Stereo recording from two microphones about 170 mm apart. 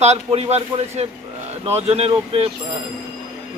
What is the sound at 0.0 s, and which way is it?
Speech, 40° right (ahead or behind).